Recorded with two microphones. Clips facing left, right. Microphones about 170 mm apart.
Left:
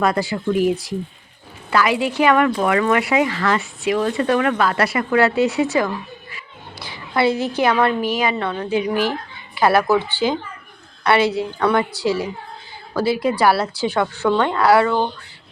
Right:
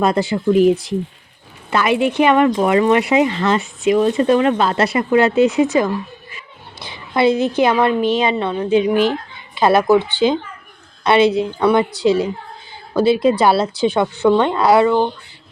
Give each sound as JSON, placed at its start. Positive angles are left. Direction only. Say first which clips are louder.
{"t": 0.0, "sound": "a woman's voice", "louder": "right 3 dB", "side_deg": -20}